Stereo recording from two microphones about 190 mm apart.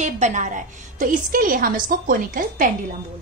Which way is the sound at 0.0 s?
40° right (ahead or behind).